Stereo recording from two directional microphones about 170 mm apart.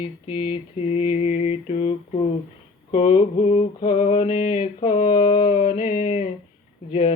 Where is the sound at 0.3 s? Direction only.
35° left (ahead or behind).